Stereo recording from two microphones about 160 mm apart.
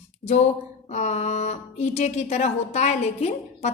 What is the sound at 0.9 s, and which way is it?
Speech, 45° left (ahead or behind).